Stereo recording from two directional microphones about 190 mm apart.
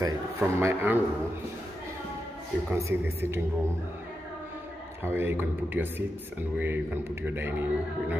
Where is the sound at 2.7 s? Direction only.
15° right (ahead or behind).